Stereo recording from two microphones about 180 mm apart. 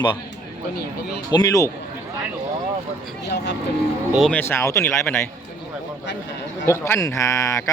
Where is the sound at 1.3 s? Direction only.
20° left (ahead or behind).